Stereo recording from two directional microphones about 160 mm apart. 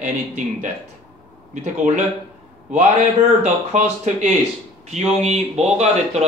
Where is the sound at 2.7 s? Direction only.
50° right (ahead or behind).